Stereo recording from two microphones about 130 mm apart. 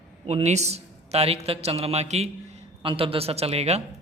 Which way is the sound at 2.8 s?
45° right (ahead or behind).